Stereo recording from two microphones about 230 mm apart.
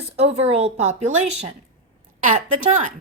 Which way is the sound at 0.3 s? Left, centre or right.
Right.